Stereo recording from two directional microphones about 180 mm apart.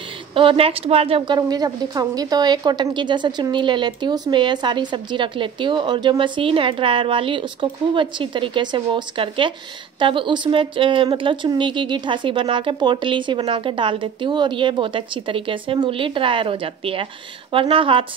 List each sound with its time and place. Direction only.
0.3 s a woman's voice: 30° right (ahead or behind)